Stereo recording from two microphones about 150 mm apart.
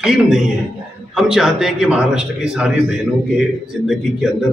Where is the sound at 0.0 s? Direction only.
5° right (ahead or behind).